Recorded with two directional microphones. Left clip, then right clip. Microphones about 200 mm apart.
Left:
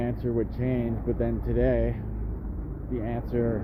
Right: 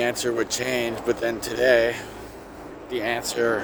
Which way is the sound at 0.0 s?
15° right (ahead or behind).